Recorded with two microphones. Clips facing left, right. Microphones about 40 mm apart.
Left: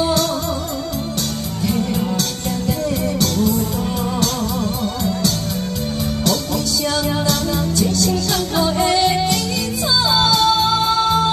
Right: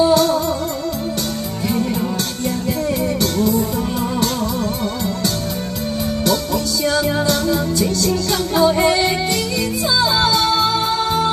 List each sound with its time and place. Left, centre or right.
6.2 s music: centre